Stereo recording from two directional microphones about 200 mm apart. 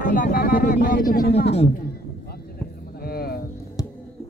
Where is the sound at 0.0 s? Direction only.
40° left (ahead or behind).